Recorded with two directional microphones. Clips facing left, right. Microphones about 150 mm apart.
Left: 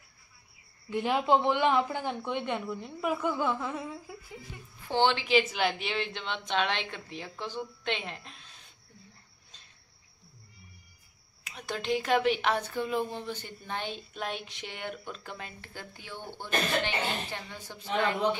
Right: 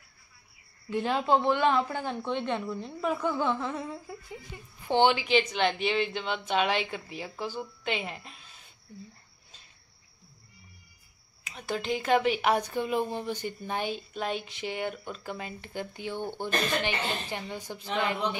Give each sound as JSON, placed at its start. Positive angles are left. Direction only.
{"t": 0.8, "sound": "speech", "side_deg": 15}
{"t": 4.8, "sound": "a woman's voice", "side_deg": -15}
{"t": 5.2, "sound": "speech", "side_deg": 5}
{"t": 11.4, "sound": "speech", "side_deg": 0}
{"t": 15.6, "sound": "a woman's voice", "side_deg": -20}